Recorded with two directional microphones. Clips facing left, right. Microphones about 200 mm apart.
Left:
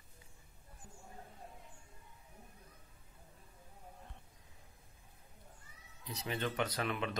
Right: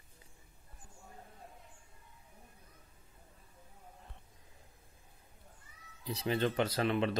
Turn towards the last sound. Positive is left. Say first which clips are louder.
# right 6 dB
turn(degrees=-30)  # may be behind; listen again after turning